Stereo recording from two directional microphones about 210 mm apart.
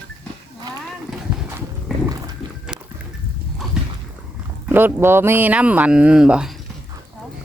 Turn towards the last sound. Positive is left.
turn(degrees=-5)  # may be behind; listen again after turning